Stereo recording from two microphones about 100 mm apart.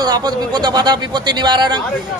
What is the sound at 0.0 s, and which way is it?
A man's voice, 45° right (ahead or behind).